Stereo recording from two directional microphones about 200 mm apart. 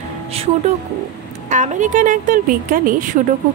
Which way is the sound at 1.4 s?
35° right (ahead or behind).